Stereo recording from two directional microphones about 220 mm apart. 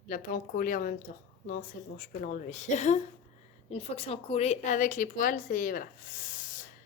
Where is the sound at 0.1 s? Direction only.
40° left (ahead or behind).